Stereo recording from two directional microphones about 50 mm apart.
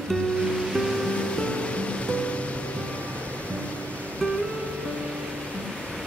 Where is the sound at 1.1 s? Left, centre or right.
Left.